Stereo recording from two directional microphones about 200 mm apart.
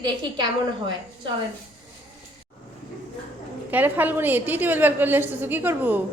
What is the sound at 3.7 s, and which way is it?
A woman's voice, 10° right (ahead or behind).